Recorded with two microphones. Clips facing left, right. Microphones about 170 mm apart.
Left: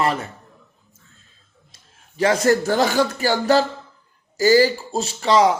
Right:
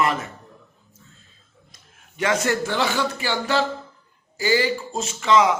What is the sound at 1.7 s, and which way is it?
A man's voice, 35° left (ahead or behind).